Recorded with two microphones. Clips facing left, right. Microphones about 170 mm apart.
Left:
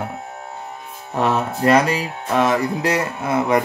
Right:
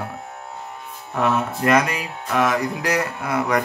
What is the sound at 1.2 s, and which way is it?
Speech, 30° left (ahead or behind).